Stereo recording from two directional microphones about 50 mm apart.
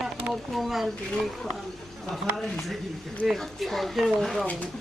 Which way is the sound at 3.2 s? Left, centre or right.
Centre.